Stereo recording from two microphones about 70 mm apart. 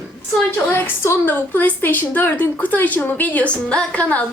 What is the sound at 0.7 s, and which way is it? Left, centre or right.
A woman's voice, left.